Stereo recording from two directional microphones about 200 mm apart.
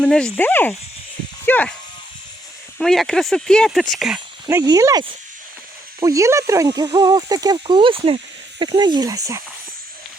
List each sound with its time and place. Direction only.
0.0 s speech: 5° left (ahead or behind)
2.7 s speech: centre (ahead or behind)
4.4 s speech: 15° right (ahead or behind)